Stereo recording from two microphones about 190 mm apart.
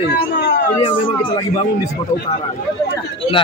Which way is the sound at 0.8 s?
25° left (ahead or behind).